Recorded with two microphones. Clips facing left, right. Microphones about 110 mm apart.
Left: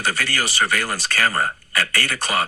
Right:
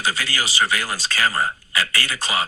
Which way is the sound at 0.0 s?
60° left (ahead or behind).